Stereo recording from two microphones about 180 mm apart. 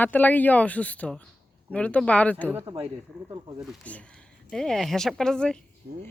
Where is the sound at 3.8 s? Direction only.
5° left (ahead or behind).